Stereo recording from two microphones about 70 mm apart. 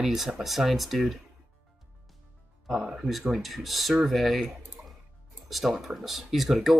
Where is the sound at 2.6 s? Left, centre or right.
Centre.